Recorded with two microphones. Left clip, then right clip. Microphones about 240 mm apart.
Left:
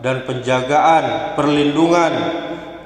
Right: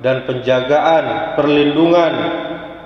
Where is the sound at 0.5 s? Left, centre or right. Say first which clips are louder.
Even; left.